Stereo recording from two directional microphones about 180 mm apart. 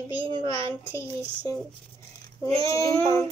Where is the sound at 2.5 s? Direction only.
30° right (ahead or behind).